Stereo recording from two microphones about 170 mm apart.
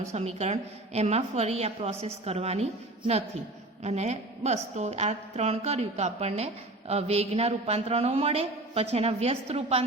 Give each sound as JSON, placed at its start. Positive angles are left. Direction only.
{"t": 0.1, "sound": "a woman's voice", "side_deg": -40}
{"t": 3.8, "sound": "a woman's voice", "side_deg": -40}